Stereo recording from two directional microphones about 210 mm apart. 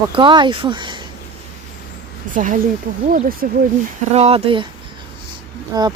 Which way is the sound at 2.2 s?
40° right (ahead or behind).